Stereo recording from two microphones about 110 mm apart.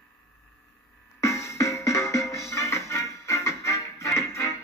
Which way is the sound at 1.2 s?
25° left (ahead or behind).